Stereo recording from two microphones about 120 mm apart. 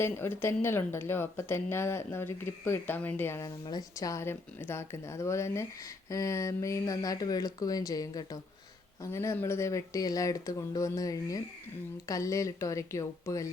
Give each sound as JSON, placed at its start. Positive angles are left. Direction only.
{"t": 0.0, "sound": "speech", "side_deg": 20}
{"t": 3.4, "sound": "speech", "side_deg": 30}